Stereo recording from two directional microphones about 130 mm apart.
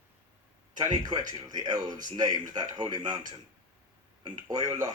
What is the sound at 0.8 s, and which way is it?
Speech, 30° right (ahead or behind).